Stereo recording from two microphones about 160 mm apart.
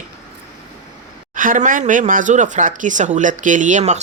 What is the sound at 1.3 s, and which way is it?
Speech, 55° right (ahead or behind).